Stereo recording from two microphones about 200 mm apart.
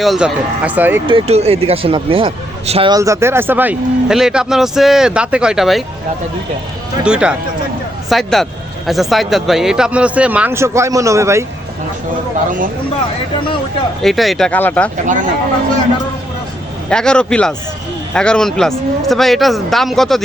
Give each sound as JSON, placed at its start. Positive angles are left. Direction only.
{"t": 0.0, "sound": "a man's voice", "side_deg": 0}
{"t": 1.0, "sound": "a man's voice", "side_deg": -30}
{"t": 7.0, "sound": "a man's voice", "side_deg": -5}
{"t": 14.0, "sound": "a man's voice", "side_deg": 0}
{"t": 15.0, "sound": "speech", "side_deg": -40}
{"t": 16.9, "sound": "a man's voice", "side_deg": 5}